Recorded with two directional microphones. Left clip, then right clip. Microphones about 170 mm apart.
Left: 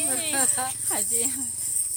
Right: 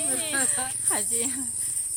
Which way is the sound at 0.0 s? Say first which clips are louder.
Left 1 dB; centre (ahead or behind).